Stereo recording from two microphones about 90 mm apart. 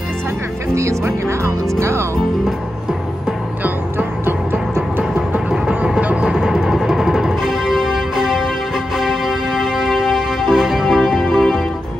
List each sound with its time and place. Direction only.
1.2 s speech: 30° right (ahead or behind)
4.3 s music: 25° right (ahead or behind)
5.5 s music: 10° right (ahead or behind)